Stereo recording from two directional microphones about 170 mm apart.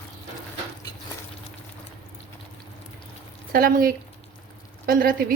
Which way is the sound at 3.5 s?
60° right (ahead or behind).